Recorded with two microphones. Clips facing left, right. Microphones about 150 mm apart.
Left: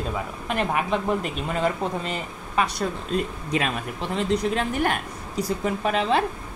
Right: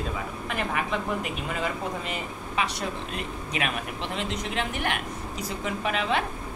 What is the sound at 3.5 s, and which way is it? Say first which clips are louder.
Speech: left 5 dB; 35° left (ahead or behind).